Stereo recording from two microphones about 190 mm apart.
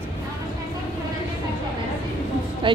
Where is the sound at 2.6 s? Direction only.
25° right (ahead or behind).